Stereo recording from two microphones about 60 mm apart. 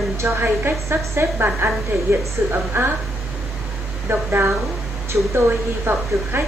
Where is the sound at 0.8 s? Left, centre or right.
Right.